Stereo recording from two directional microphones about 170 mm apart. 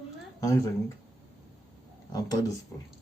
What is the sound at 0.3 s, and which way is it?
Speech, 20° left (ahead or behind).